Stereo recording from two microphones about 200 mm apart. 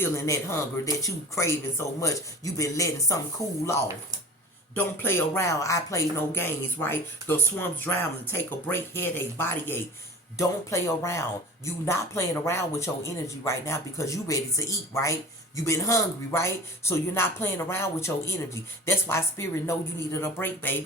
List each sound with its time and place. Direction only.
0.0 s speech: 15° left (ahead or behind)
4.7 s speech: 10° left (ahead or behind)